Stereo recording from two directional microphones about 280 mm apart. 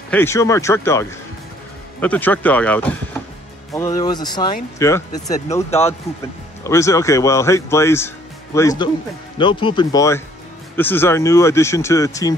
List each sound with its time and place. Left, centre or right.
0.1 s speech: centre
5.5 s speech: left
6.6 s speech: centre